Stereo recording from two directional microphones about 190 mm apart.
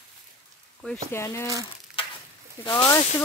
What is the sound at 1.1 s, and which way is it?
Speech, 15° left (ahead or behind).